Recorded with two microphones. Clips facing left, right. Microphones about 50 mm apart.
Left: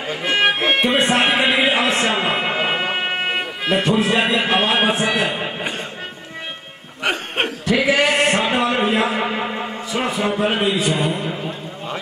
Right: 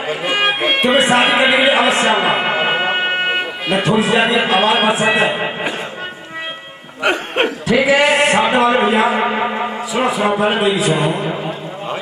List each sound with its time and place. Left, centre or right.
0.1 s music: centre
0.7 s speech: centre
2.0 s a sound: centre
4.5 s speech: centre
5.0 s speech: right
7.0 s music: centre
7.7 s a sound: centre
9.9 s a man's voice: centre